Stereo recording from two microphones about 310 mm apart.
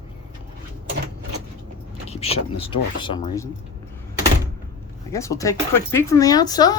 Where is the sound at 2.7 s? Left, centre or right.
Centre.